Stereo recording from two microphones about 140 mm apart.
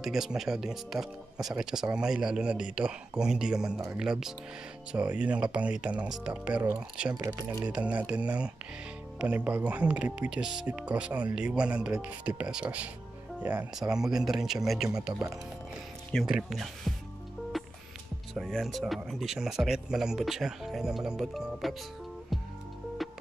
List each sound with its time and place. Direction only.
0.0 s speech: 5° right (ahead or behind); by 7.6 s 20° right (ahead or behind)
7.6 s speech: 10° right (ahead or behind)
18.3 s speech: centre (ahead or behind)
23.0 s music: centre (ahead or behind)